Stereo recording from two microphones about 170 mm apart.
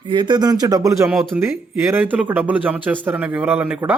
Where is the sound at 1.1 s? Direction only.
Centre (ahead or behind).